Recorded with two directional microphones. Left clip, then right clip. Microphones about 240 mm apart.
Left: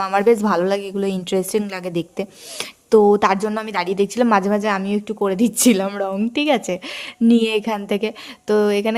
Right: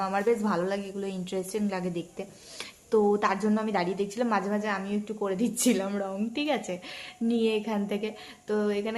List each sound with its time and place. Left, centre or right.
0.0 s speech: left